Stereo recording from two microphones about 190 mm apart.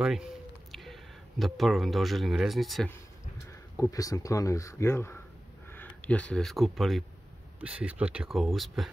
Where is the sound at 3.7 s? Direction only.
15° left (ahead or behind); by 8.9 s centre (ahead or behind).